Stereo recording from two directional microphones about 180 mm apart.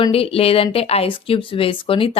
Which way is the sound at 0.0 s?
30° left (ahead or behind).